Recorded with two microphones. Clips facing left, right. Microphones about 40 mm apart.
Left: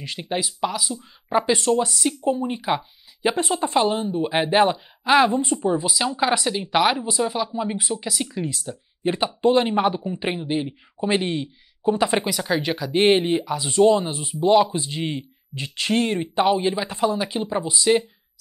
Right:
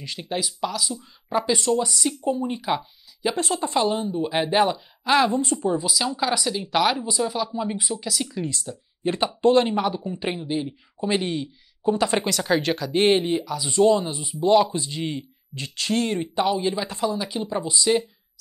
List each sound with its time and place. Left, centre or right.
0.0 s speech: centre
3.2 s speech: left
5.3 s speech: left